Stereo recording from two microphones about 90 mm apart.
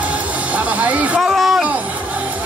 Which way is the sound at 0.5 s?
15° right (ahead or behind).